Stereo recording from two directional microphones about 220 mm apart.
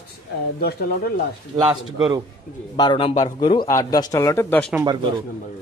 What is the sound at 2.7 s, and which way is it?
A man's voice, 20° left (ahead or behind).